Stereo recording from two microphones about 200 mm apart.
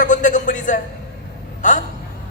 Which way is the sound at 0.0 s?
40° left (ahead or behind).